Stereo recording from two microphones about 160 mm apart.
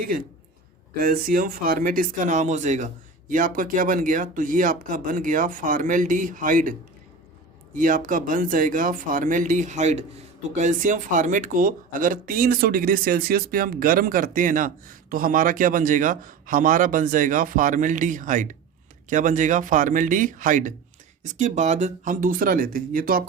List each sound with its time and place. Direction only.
0.9 s speech: 65° right (ahead or behind)
7.8 s speech: 60° right (ahead or behind)